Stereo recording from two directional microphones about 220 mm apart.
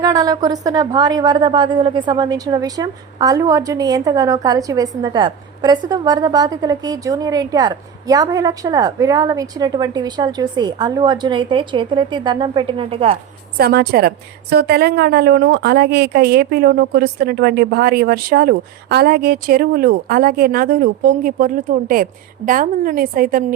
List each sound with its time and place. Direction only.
0.0 s a woman's voice: 15° right (ahead or behind)
13.6 s a woman's voice: 45° right (ahead or behind)